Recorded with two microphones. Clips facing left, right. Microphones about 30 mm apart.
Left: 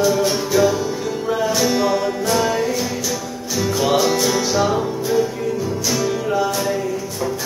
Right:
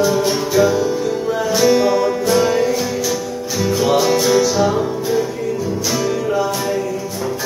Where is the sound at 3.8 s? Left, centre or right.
Centre.